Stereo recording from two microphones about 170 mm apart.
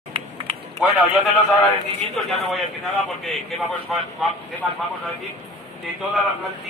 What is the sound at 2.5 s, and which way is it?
A man's voice, centre (ahead or behind).